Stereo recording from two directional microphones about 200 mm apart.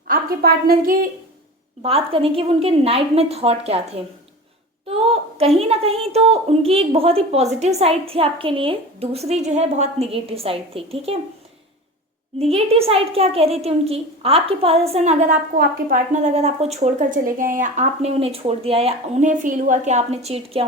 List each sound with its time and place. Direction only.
0.1 s a woman's voice: 45° right (ahead or behind)
1.8 s a woman's voice: 30° right (ahead or behind)
5.4 s a woman's voice: 30° right (ahead or behind)
12.4 s a woman's voice: 30° right (ahead or behind)